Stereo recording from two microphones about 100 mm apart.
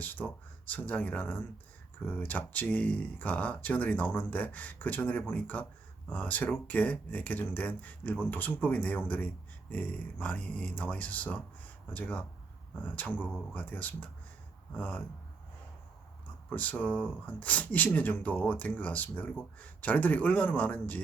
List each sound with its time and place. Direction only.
0.0 s speech: 15° left (ahead or behind)
16.5 s speech: 15° left (ahead or behind)